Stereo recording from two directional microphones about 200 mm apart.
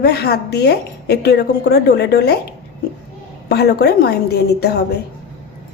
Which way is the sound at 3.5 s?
55° left (ahead or behind).